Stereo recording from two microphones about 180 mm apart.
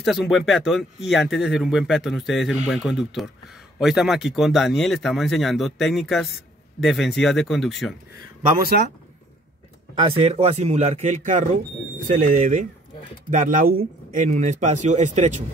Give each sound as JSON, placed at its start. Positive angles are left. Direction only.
{"t": 0.0, "sound": "speech", "side_deg": 0}
{"t": 8.4, "sound": "speech", "side_deg": -45}
{"t": 10.1, "sound": "speech", "side_deg": -35}